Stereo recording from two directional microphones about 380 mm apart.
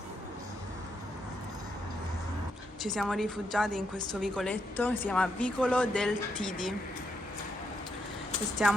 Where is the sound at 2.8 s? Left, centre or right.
Centre.